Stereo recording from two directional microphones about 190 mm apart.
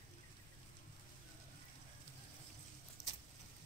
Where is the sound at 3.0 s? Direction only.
65° left (ahead or behind).